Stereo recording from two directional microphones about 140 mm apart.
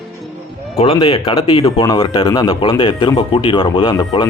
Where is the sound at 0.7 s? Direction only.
40° left (ahead or behind).